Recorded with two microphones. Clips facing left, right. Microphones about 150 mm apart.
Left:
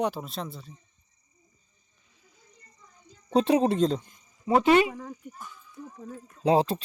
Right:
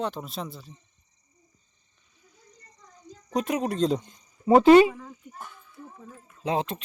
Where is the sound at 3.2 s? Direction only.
30° left (ahead or behind).